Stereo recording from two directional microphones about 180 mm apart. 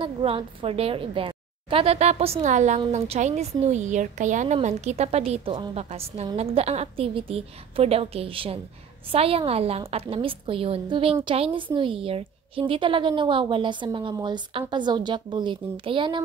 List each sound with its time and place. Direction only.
0.0 s a woman's voice: 30° right (ahead or behind)